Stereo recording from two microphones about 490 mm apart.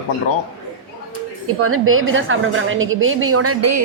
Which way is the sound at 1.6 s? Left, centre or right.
Right.